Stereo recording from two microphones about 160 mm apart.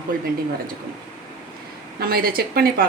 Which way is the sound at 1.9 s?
70° right (ahead or behind).